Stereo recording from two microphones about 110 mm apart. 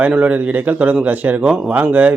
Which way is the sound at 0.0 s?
15° right (ahead or behind).